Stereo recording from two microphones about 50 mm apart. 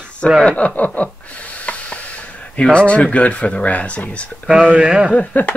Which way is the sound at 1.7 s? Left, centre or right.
Left.